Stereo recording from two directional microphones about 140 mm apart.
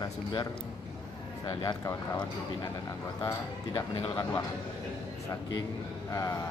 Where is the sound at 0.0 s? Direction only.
30° left (ahead or behind).